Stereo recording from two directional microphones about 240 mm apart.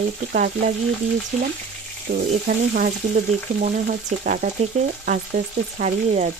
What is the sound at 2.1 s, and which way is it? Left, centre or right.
Frying, right.